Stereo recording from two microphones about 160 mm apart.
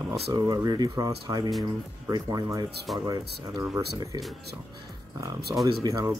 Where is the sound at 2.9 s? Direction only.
Centre (ahead or behind).